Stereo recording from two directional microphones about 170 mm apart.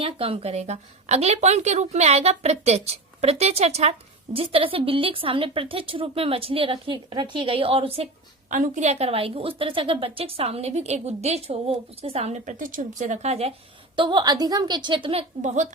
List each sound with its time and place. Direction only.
0.0 s a woman's voice: 35° right (ahead or behind)
8.4 s a woman's voice: 50° right (ahead or behind)
13.9 s a woman's voice: 25° right (ahead or behind)
15.4 s speech: 45° right (ahead or behind)